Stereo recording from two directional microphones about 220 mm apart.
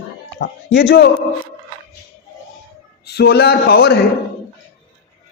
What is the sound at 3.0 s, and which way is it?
A man's voice, 50° left (ahead or behind).